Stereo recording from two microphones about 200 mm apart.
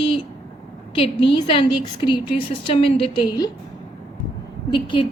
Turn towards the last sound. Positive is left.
turn(degrees=25)  # may be behind; listen again after turning